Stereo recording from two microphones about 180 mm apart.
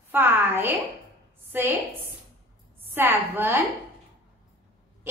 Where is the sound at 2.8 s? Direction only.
10° right (ahead or behind).